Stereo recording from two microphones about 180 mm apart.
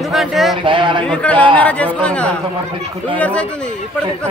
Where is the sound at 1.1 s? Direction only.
5° left (ahead or behind).